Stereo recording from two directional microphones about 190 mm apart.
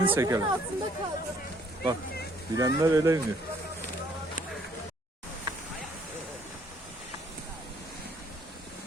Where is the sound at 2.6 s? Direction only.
15° right (ahead or behind).